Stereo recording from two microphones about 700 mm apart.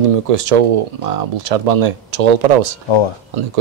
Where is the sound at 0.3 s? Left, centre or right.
Right.